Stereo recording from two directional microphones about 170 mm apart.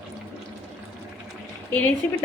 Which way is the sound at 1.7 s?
10° left (ahead or behind).